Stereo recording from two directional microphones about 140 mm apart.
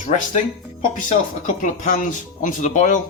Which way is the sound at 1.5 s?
60° left (ahead or behind).